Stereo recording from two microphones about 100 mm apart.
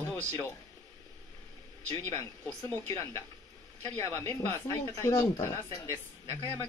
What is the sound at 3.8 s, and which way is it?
Speech, 25° left (ahead or behind).